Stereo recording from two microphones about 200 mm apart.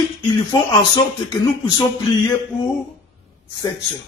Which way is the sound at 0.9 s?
20° left (ahead or behind).